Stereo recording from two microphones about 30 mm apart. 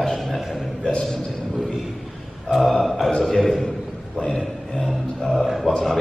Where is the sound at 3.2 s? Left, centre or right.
Centre.